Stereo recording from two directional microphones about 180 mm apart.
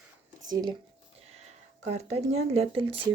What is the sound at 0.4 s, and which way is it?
Speech, 25° right (ahead or behind).